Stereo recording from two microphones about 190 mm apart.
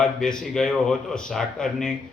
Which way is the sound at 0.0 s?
5° left (ahead or behind).